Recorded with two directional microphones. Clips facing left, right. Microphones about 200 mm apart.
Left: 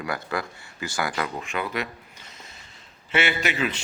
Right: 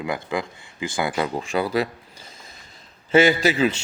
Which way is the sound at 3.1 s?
35° right (ahead or behind).